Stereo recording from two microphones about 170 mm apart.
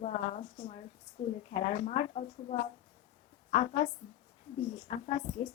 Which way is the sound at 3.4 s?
40° left (ahead or behind).